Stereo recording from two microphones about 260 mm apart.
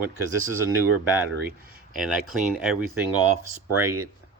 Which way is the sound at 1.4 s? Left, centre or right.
Right.